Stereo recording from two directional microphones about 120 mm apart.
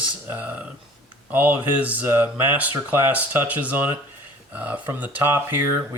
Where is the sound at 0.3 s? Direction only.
15° right (ahead or behind).